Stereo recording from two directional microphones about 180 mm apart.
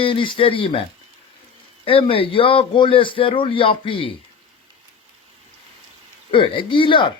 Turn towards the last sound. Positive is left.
turn(degrees=30)  # may be behind; listen again after turning